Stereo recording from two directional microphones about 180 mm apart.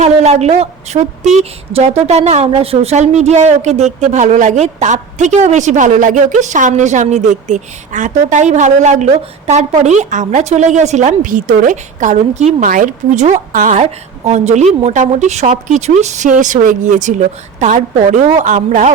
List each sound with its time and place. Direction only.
0.0 s a woman's voice: 40° right (ahead or behind)
0.9 s speech: 20° right (ahead or behind)
1.4 s a woman's voice: 35° right (ahead or behind)